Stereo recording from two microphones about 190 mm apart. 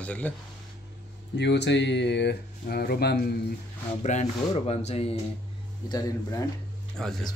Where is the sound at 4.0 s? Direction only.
35° left (ahead or behind).